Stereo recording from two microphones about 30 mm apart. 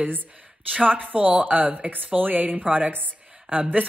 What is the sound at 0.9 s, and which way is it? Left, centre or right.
Speech, right.